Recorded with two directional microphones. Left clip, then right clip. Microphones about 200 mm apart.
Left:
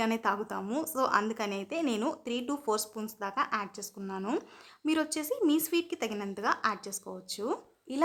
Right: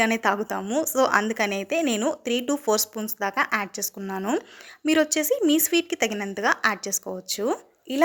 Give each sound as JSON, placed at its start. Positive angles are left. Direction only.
{"t": 0.0, "sound": "a woman's voice", "side_deg": -20}